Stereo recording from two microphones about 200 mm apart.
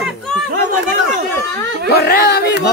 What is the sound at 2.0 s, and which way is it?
Speech, 55° left (ahead or behind).